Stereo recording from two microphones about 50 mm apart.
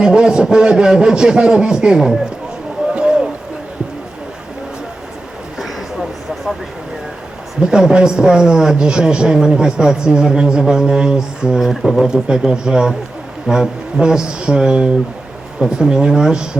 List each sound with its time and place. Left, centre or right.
0.0 s a man's voice: centre
2.9 s run: centre
5.5 s a sound: centre
7.6 s a man's voice: centre
11.6 s speech: centre
12.0 s a man's voice: centre